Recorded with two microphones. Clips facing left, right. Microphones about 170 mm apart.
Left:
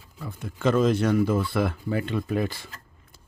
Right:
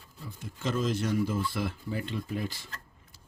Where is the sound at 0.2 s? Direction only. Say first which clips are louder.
Left 9 dB; 65° left (ahead or behind).